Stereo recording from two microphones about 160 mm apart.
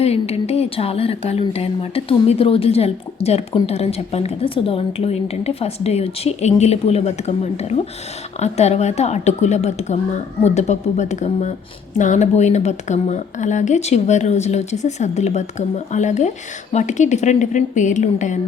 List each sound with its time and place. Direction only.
0.0 s a woman's voice: 40° left (ahead or behind)